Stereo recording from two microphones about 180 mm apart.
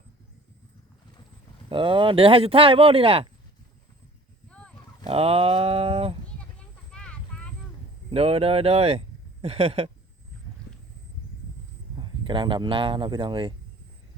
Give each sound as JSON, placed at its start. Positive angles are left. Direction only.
{"t": 1.7, "sound": "speech", "side_deg": -30}
{"t": 5.0, "sound": "speech", "side_deg": -35}
{"t": 6.9, "sound": "vehicle", "side_deg": 5}
{"t": 8.1, "sound": "speech", "side_deg": -35}
{"t": 11.9, "sound": "speech", "side_deg": -30}